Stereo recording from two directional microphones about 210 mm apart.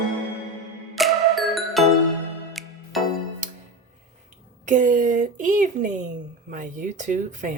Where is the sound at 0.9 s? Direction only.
Centre (ahead or behind).